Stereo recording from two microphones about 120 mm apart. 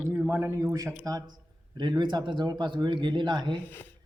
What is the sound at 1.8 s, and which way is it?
Speech, 40° right (ahead or behind).